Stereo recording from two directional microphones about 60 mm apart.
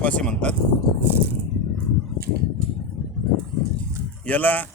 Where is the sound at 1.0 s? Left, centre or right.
Right.